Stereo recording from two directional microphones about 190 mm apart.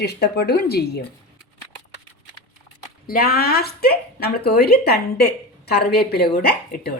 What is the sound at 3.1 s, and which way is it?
A woman's voice, 55° left (ahead or behind).